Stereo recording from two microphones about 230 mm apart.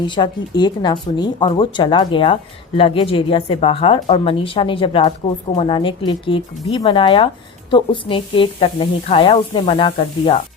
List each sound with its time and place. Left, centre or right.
0.0 s speech: centre